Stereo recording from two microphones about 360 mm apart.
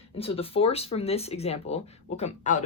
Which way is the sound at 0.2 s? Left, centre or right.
Centre.